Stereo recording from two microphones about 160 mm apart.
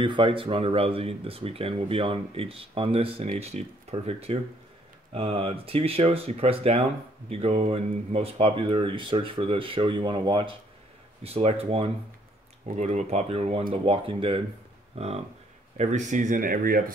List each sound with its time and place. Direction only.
0.0 s speech: 30° right (ahead or behind); by 16.9 s 65° right (ahead or behind)